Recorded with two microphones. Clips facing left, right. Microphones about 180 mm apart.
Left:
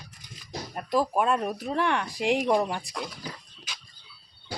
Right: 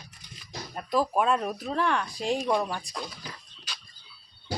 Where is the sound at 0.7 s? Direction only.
5° left (ahead or behind).